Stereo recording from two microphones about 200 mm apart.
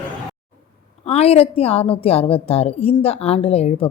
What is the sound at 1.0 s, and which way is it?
A woman's voice, 30° left (ahead or behind).